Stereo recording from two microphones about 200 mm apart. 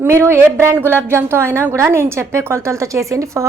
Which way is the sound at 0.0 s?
10° right (ahead or behind).